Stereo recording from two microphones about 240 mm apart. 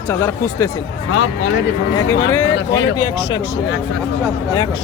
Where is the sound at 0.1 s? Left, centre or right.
Centre.